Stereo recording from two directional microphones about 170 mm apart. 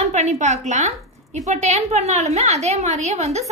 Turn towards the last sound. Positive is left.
turn(degrees=-40)  # may be behind; listen again after turning